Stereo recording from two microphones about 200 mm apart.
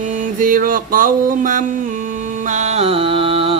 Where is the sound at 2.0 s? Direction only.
40° right (ahead or behind).